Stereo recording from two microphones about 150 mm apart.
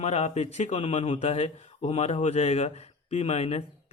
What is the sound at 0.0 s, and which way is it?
A man's voice, 45° left (ahead or behind).